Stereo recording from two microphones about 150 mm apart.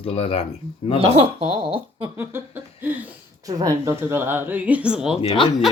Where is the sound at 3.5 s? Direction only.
25° right (ahead or behind); by 5.7 s centre (ahead or behind).